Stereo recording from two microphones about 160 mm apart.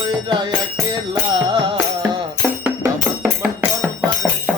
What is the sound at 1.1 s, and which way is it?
Music, 30° right (ahead or behind).